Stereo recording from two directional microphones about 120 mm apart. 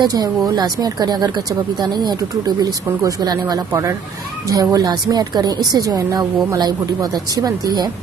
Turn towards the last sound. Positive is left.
turn(degrees=-30)  # may be behind; listen again after turning